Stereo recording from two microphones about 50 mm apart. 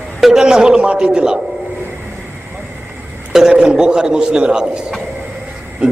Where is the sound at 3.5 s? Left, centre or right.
Centre.